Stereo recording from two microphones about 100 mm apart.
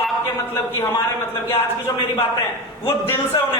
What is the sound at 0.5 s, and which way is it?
Speech, 25° left (ahead or behind).